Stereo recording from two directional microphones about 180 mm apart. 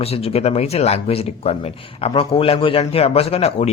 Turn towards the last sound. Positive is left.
turn(degrees=35)  # may be behind; listen again after turning